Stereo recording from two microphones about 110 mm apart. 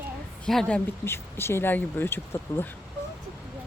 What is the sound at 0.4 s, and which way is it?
Speech, 5° left (ahead or behind).